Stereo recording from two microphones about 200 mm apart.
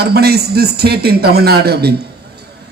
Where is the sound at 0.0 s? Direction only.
50° right (ahead or behind).